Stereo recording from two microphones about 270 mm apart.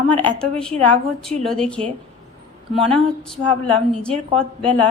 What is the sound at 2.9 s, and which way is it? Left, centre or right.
A woman's voice, centre.